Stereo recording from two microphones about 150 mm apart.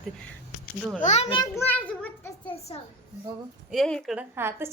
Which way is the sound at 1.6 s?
10° left (ahead or behind).